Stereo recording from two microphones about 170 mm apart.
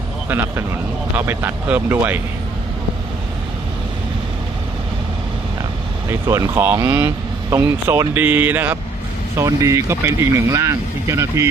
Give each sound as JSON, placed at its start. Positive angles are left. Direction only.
{"t": 1.1, "sound": "speech", "side_deg": -10}
{"t": 6.1, "sound": "speech", "side_deg": -15}